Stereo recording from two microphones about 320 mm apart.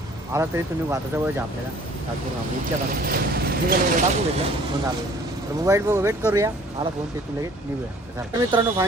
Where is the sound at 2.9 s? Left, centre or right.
Right.